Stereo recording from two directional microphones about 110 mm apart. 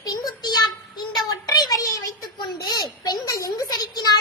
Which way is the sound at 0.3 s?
40° left (ahead or behind).